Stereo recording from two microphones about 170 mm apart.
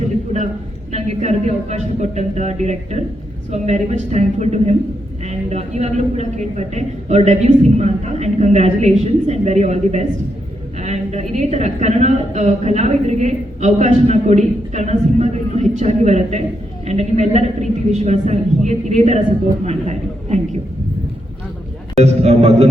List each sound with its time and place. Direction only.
0.9 s a woman's voice: 40° right (ahead or behind)
22.0 s a woman's voice: 40° right (ahead or behind)